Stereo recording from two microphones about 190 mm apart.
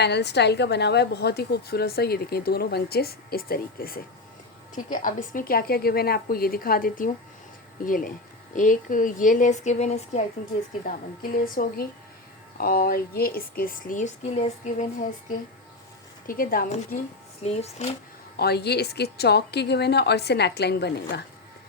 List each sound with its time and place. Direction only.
0.0 s a woman's voice: 60° left (ahead or behind); by 10.2 s 35° left (ahead or behind)
10.8 s a woman's voice: 45° left (ahead or behind)
16.2 s a woman's voice: 50° left (ahead or behind)
17.4 s speech: 35° left (ahead or behind)
18.3 s a woman's voice: 60° left (ahead or behind)